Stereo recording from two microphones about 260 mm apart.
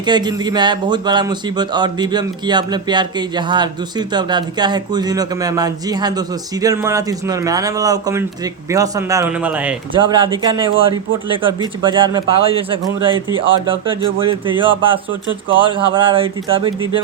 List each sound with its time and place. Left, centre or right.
0.0 s a man's voice: centre
10.1 s a man's voice: centre